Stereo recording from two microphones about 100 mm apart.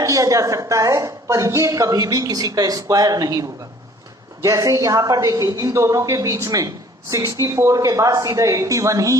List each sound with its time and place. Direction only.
0.0 s a woman's voice: 35° right (ahead or behind)
4.4 s a woman's voice: 35° right (ahead or behind)